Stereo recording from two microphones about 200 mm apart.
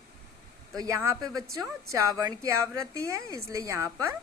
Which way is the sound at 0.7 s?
15° right (ahead or behind).